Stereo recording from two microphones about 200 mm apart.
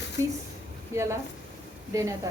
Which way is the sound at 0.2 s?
15° right (ahead or behind).